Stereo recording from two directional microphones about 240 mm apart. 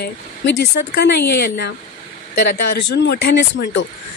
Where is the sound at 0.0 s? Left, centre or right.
Left.